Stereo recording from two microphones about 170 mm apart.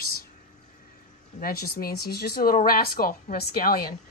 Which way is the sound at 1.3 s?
60° left (ahead or behind).